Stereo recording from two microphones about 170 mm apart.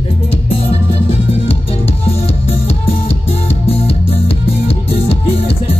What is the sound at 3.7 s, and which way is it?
Music, 35° left (ahead or behind).